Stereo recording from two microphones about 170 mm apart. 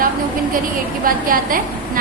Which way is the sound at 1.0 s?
55° right (ahead or behind).